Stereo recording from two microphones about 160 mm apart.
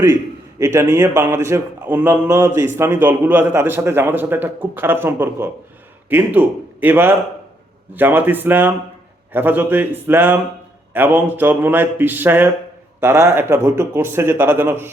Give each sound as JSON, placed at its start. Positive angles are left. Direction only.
{"t": 0.6, "sound": "a man's voice", "side_deg": -15}